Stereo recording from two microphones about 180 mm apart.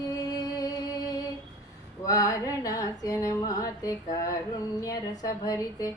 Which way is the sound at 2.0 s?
20° left (ahead or behind).